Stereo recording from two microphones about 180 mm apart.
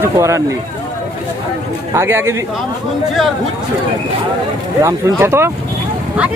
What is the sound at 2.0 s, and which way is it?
Speech, 15° right (ahead or behind).